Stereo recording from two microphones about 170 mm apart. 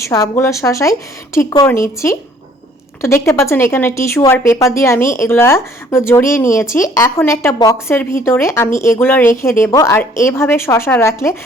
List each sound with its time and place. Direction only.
0.0 s speech: 15° left (ahead or behind)